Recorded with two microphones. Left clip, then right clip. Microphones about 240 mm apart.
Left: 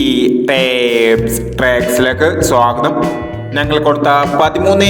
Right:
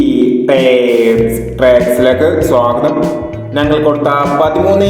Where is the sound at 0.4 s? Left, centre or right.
Left.